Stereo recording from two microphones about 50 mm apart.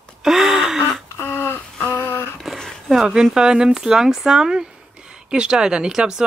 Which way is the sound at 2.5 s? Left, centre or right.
Centre.